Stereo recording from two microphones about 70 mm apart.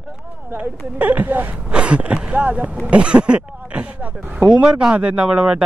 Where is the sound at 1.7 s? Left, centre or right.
Centre.